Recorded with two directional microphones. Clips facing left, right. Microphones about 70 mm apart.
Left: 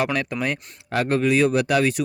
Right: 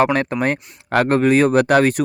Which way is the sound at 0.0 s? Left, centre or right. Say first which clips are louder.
Right 7 dB; right.